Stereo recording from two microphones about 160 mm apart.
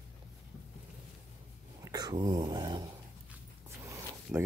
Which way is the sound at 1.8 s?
25° right (ahead or behind).